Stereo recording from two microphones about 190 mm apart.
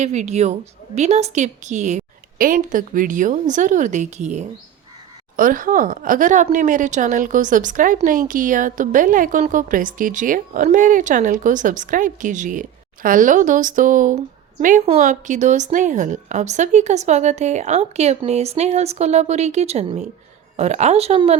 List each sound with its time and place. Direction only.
0.0 s a woman's voice: 40° right (ahead or behind)